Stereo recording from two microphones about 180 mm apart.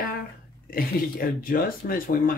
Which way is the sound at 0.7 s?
55° left (ahead or behind).